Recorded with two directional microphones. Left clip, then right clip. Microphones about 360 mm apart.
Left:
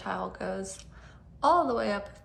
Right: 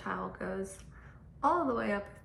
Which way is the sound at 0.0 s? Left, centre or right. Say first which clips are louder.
Left 4 dB; centre.